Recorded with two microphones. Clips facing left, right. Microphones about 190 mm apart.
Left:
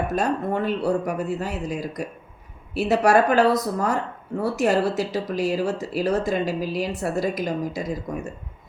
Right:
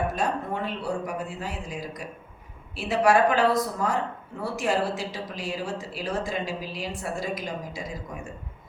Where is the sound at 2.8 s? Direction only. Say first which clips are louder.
Left 3 dB; 40° left (ahead or behind).